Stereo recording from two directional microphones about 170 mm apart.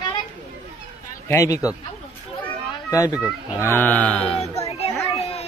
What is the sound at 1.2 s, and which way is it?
Speech, 20° left (ahead or behind).